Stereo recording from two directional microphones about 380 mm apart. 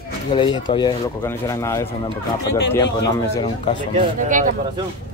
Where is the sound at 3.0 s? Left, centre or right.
Centre.